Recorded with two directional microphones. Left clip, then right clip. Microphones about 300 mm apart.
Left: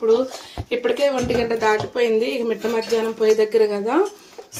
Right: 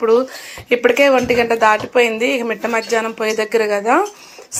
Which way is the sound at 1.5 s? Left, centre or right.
Right.